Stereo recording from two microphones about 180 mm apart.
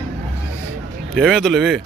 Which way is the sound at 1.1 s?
5° left (ahead or behind).